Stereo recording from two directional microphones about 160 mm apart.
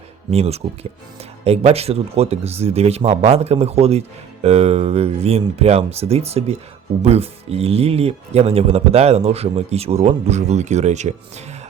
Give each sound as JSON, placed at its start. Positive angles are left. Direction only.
{"t": 0.3, "sound": "speech", "side_deg": -40}